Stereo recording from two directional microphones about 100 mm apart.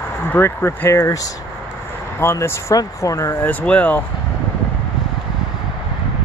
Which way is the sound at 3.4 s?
15° left (ahead or behind).